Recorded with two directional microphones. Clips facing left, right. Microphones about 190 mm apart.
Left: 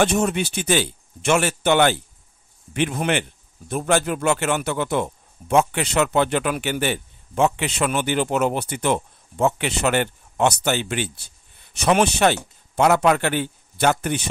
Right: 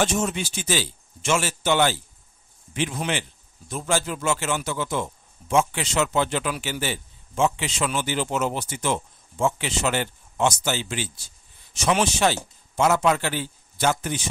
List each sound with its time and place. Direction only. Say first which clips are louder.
0.0 s speech: left 4 dB; 60° left (ahead or behind)